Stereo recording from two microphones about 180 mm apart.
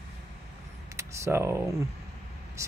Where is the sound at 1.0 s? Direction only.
15° right (ahead or behind).